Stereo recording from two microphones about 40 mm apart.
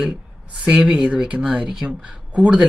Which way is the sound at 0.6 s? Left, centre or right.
Right.